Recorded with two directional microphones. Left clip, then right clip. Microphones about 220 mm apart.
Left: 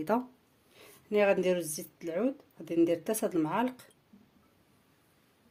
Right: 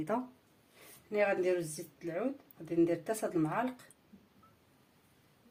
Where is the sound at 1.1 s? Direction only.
50° left (ahead or behind).